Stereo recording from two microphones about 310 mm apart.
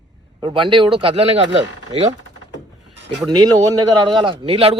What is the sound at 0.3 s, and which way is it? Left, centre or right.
Speech, centre.